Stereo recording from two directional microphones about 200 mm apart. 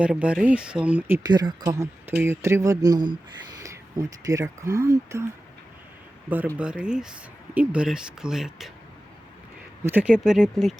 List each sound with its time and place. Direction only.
0.0 s speech: 5° right (ahead or behind)
1.3 s speech: 20° right (ahead or behind)
6.2 s speech: 10° right (ahead or behind)
9.8 s speech: 10° right (ahead or behind)